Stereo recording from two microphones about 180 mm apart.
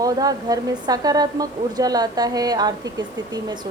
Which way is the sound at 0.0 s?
20° right (ahead or behind).